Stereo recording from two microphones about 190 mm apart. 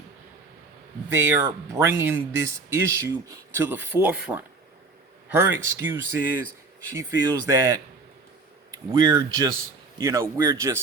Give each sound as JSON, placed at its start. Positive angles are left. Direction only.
{"t": 1.1, "sound": "speech", "side_deg": -15}